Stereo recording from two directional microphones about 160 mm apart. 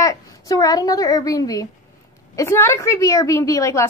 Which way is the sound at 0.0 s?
20° left (ahead or behind).